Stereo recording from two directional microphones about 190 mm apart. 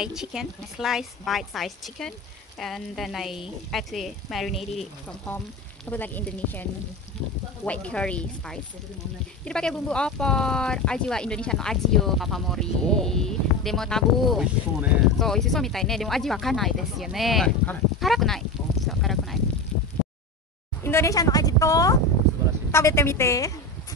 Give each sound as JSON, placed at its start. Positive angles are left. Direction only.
{"t": 0.0, "sound": "speech", "side_deg": -5}
{"t": 5.9, "sound": "speech", "side_deg": 10}
{"t": 18.9, "sound": "a sound", "side_deg": 0}
{"t": 20.8, "sound": "a woman's voice", "side_deg": 15}